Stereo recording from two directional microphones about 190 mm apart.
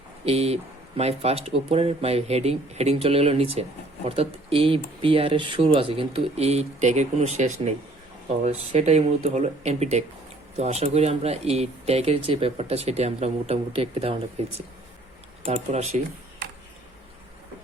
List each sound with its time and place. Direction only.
0.3 s speech: 35° right (ahead or behind)
15.4 s speech: 35° right (ahead or behind)